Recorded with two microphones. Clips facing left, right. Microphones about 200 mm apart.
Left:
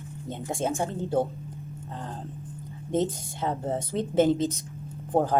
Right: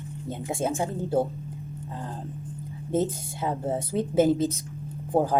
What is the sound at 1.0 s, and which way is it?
Speech, 5° right (ahead or behind).